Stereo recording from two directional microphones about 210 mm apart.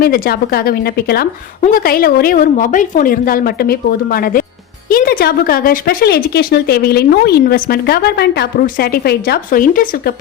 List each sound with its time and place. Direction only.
0.0 s speech: 45° left (ahead or behind)